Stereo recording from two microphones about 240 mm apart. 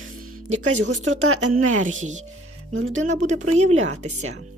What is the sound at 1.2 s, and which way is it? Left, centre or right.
Speech, right.